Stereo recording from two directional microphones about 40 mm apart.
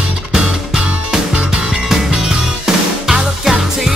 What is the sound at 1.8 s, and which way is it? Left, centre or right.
Music, centre.